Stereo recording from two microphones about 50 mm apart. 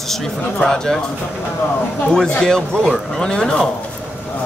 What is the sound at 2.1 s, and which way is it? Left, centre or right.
A man's voice, centre.